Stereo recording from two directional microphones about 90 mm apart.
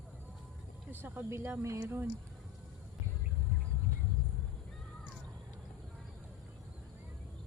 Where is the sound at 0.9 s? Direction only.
25° right (ahead or behind).